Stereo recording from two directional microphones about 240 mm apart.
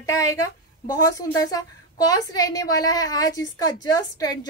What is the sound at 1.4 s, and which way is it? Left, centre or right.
Speech, centre.